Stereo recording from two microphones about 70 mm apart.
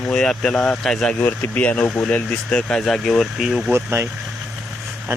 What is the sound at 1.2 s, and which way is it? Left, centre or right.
Speech, left.